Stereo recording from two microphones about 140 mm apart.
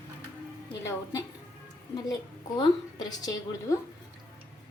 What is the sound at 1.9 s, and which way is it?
A woman's voice, 30° left (ahead or behind).